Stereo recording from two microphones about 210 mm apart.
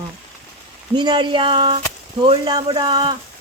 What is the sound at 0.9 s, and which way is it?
Speech, 20° right (ahead or behind).